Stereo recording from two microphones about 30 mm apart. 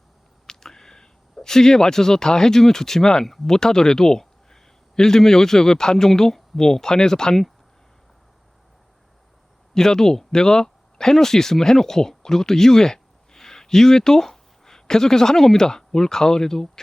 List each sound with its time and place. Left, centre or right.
0.4 s speech: centre
9.7 s speech: centre